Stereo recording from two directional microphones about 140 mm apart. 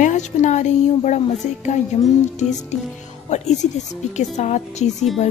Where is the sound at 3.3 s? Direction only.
55° left (ahead or behind).